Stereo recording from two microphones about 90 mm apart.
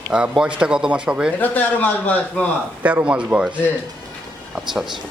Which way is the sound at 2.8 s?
15° right (ahead or behind).